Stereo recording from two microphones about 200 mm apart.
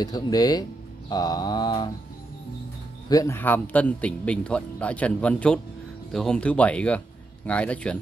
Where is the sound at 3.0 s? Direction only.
15° left (ahead or behind).